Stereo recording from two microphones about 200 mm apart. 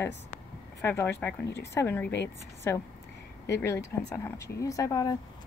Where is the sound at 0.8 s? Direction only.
10° left (ahead or behind).